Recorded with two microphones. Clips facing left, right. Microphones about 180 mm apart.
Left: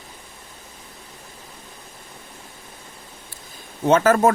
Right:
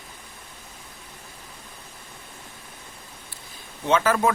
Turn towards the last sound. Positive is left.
turn(degrees=45)  # may be behind; listen again after turning